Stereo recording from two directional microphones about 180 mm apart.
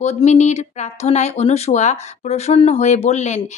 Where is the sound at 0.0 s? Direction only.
40° left (ahead or behind).